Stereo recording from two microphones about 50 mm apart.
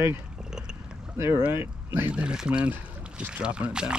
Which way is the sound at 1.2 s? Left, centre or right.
Right.